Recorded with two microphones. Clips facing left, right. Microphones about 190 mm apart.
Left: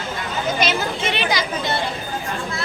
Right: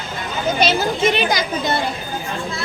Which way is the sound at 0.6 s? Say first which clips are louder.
Right 7 dB; 35° right (ahead or behind).